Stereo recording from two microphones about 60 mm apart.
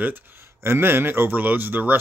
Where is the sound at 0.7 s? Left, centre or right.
Right.